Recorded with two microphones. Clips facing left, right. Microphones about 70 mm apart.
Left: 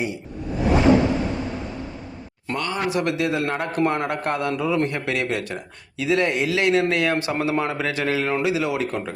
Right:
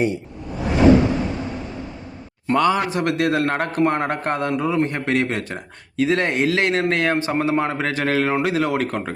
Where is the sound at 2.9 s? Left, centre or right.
Right.